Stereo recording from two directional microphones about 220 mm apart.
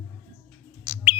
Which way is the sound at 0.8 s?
10° right (ahead or behind).